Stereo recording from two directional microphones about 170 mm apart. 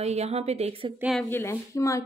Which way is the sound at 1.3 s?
15° left (ahead or behind).